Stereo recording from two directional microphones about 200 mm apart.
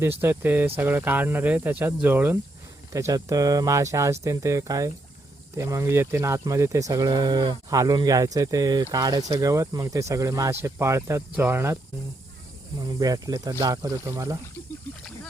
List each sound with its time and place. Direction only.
0.2 s speech: 10° right (ahead or behind)
12.8 s speech: 20° right (ahead or behind)